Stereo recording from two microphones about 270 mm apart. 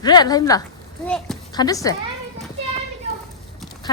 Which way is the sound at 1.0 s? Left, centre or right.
Centre.